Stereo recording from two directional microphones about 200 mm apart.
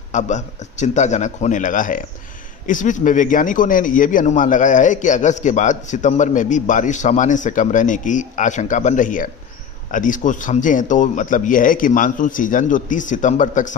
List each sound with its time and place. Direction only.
0.1 s a man's voice: 35° left (ahead or behind)